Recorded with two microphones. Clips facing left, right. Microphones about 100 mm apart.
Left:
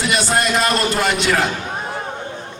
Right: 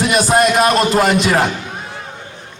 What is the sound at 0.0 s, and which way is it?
A man's voice, 45° right (ahead or behind).